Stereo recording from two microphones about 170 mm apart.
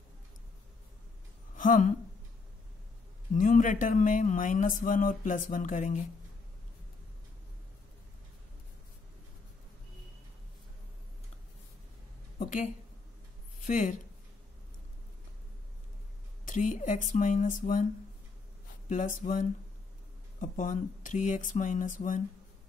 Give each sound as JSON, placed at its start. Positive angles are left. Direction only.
{"t": 1.6, "sound": "speech", "side_deg": 50}
{"t": 3.3, "sound": "speech", "side_deg": 50}
{"t": 12.4, "sound": "speech", "side_deg": 45}
{"t": 16.4, "sound": "speech", "side_deg": 50}
{"t": 18.9, "sound": "speech", "side_deg": 50}